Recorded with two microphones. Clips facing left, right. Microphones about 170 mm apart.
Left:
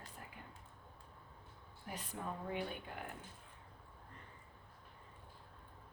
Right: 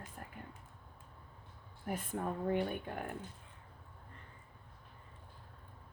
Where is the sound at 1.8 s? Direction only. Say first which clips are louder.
Right 7 dB; 50° right (ahead or behind).